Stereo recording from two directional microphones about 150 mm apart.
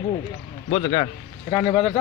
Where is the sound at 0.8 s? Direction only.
35° left (ahead or behind).